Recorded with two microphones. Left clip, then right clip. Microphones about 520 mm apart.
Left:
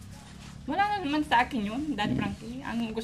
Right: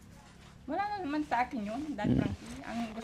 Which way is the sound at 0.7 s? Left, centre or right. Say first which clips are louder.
Left 7 dB; left.